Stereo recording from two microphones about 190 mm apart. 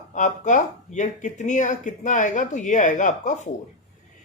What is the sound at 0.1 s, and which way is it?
Speech, 40° left (ahead or behind).